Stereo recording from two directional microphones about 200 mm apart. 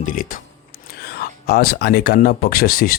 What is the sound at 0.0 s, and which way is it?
Speech, 40° left (ahead or behind).